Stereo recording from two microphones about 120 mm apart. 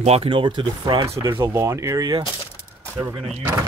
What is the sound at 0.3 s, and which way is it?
Speech, 45° right (ahead or behind).